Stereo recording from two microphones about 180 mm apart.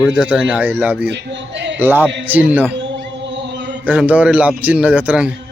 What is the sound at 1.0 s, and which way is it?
Speech, 80° right.